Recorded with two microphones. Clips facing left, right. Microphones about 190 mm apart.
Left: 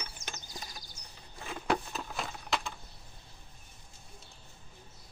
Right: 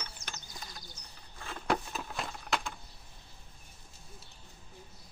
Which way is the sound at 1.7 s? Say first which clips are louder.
Even; centre (ahead or behind).